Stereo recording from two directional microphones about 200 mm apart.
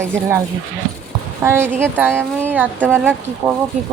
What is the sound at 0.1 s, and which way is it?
Speech, 10° right (ahead or behind).